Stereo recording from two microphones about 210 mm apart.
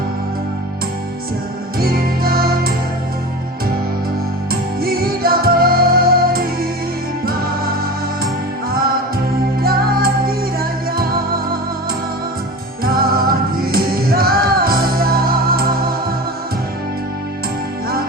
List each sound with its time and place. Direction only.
1.8 s music: 45° right (ahead or behind)
4.8 s music: 45° right (ahead or behind)
9.6 s music: 45° right (ahead or behind)
12.8 s music: 45° right (ahead or behind)